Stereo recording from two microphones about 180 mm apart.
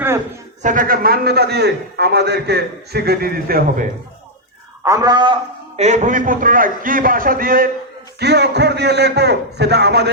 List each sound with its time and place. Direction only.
0.6 s a man's voice: 45° right (ahead or behind)
4.8 s a man's voice: 20° right (ahead or behind)
5.8 s a man's voice: 40° right (ahead or behind)
8.2 s a man's voice: 70° right (ahead or behind)